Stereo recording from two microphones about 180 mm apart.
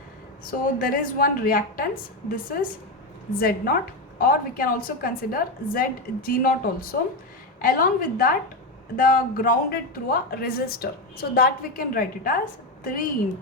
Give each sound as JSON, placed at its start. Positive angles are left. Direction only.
{"t": 0.8, "sound": "a woman's voice", "side_deg": 55}